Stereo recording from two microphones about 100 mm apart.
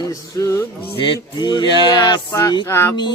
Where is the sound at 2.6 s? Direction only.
25° left (ahead or behind).